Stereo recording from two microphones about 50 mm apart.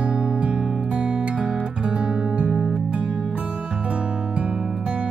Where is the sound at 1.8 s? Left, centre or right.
Right.